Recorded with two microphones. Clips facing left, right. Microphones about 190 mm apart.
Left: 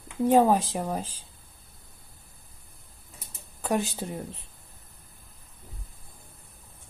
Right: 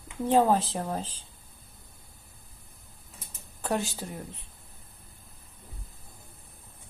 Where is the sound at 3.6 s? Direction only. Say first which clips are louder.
Left 2 dB; 15° left (ahead or behind).